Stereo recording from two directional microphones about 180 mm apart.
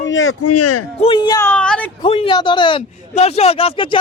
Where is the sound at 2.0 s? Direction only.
30° left (ahead or behind).